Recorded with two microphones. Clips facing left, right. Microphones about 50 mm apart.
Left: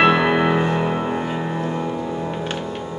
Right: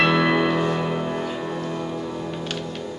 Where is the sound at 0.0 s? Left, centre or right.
Left.